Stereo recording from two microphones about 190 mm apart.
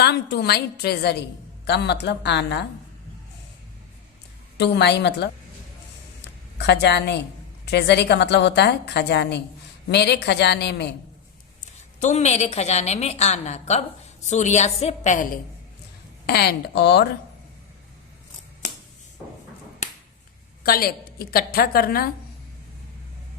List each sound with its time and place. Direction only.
0.0 s a woman's voice: 60° left (ahead or behind)
4.5 s a woman's voice: 65° left (ahead or behind)
6.6 s a woman's voice: 65° left (ahead or behind)
11.9 s a woman's voice: 40° left (ahead or behind)
16.2 s a woman's voice: 55° left (ahead or behind)
20.7 s a woman's voice: 50° left (ahead or behind)